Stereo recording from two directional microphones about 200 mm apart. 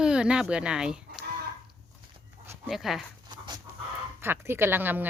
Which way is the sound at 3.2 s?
20° right (ahead or behind).